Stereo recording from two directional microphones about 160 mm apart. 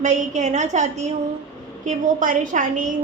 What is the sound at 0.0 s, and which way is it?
Child singing, 50° right (ahead or behind).